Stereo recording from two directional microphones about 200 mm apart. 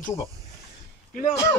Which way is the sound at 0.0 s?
15° left (ahead or behind).